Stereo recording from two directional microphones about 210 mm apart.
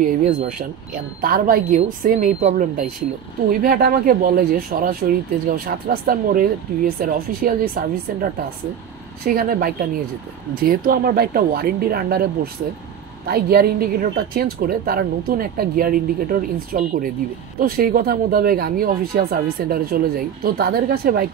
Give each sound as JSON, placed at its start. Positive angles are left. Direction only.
{"t": 1.2, "sound": "a woman's voice", "side_deg": -45}
{"t": 13.3, "sound": "a woman's voice", "side_deg": -45}